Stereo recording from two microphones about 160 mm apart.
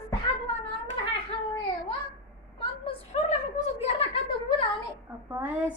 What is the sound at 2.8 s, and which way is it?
A woman's voice, 45° left (ahead or behind).